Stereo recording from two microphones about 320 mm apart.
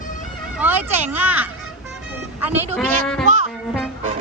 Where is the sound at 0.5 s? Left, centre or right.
Centre.